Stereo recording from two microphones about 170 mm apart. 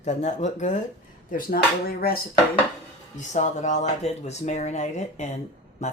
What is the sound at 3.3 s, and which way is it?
Speech, 45° left (ahead or behind).